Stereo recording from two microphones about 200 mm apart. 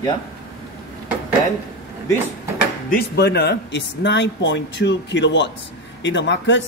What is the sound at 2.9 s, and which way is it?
A man's voice, 55° left (ahead or behind).